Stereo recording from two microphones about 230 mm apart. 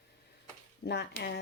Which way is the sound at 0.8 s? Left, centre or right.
Left.